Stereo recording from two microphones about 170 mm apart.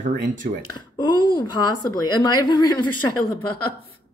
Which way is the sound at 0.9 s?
25° left (ahead or behind).